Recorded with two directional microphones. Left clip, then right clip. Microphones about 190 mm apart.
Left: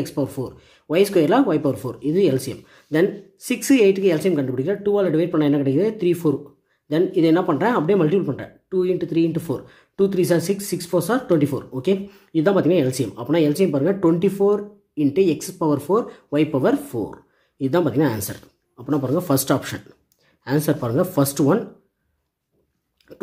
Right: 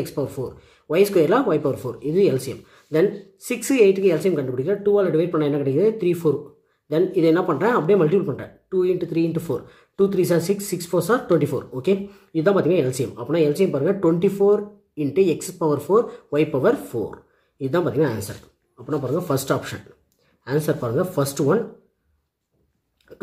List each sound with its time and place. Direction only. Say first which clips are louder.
0.0 s speech: left 1 dB; 25° left (ahead or behind)
23.1 s chewing: left 2 dB; 40° left (ahead or behind)